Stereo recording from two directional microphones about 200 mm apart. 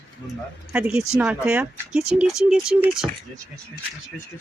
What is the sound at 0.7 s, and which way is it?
Speech, 5° right (ahead or behind).